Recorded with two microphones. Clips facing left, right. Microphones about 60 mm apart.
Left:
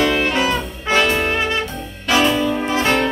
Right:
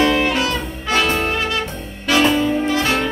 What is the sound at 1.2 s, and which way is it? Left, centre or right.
Music, left.